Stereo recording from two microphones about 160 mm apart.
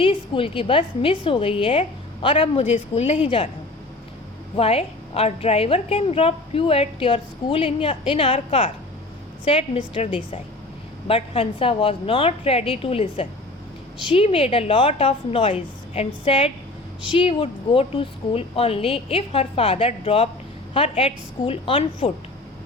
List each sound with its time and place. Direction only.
0.0 s a woman's voice: 35° left (ahead or behind)
4.5 s a woman's voice: 40° left (ahead or behind)